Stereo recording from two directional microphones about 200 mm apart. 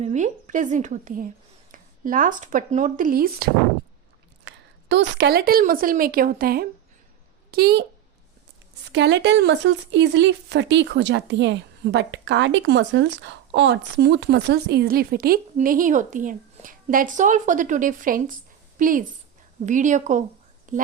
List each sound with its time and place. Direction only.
0.0 s a woman's voice: 35° right (ahead or behind)
4.4 s a woman's voice: 60° right (ahead or behind)
8.9 s a woman's voice: 60° right (ahead or behind); by 20.8 s 40° right (ahead or behind)